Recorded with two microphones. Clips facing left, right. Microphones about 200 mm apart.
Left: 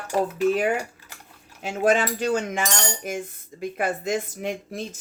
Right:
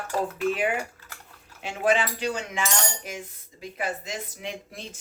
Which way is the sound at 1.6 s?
45° left (ahead or behind).